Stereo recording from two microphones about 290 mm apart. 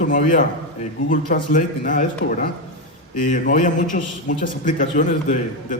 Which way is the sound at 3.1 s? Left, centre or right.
Left.